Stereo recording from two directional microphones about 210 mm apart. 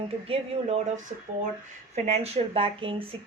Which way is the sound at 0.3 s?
30° right (ahead or behind).